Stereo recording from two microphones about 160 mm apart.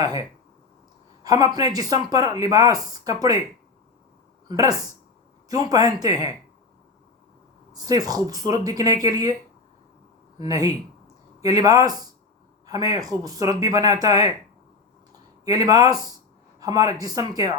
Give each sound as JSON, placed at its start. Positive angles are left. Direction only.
{"t": 0.0, "sound": "speech", "side_deg": -25}
{"t": 4.4, "sound": "speech", "side_deg": -20}
{"t": 7.7, "sound": "speech", "side_deg": -25}
{"t": 10.3, "sound": "speech", "side_deg": -20}
{"t": 15.4, "sound": "speech", "side_deg": -25}